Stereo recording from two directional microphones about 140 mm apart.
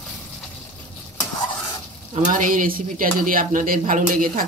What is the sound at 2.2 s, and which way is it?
Speech, 70° right (ahead or behind).